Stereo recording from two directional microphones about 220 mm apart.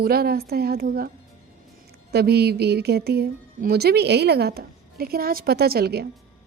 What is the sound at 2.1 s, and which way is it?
A woman's voice, 45° right (ahead or behind).